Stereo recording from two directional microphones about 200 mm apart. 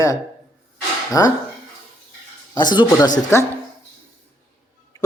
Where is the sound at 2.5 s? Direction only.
20° left (ahead or behind).